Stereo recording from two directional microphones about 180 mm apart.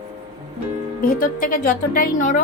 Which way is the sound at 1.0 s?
50° left (ahead or behind).